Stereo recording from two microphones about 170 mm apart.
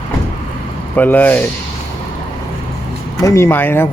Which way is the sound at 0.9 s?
10° left (ahead or behind).